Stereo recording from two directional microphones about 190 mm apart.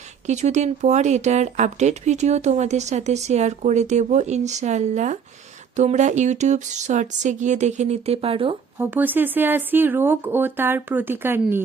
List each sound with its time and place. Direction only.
0.3 s speech: 40° right (ahead or behind)
8.8 s speech: 10° right (ahead or behind)